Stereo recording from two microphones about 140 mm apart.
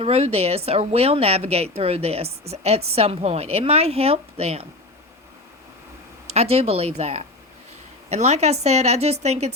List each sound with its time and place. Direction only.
0.0 s a woman's voice: 45° right (ahead or behind)
6.2 s a woman's voice: 50° right (ahead or behind)